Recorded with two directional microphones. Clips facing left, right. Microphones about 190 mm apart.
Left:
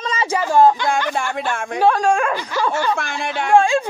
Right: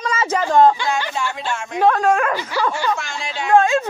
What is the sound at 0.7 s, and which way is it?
Speech, 55° left (ahead or behind).